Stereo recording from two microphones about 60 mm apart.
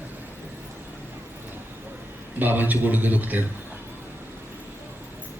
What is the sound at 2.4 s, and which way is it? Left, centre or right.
A man's voice, right.